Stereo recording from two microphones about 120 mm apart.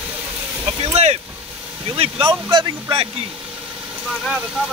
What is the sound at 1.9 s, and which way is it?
Speech, 50° right (ahead or behind).